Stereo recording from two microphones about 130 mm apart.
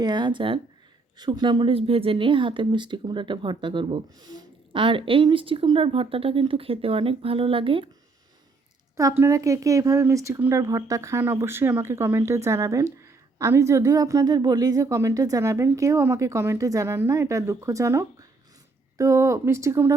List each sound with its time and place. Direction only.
0.0 s speech: 35° right (ahead or behind)
9.0 s speech: 25° right (ahead or behind)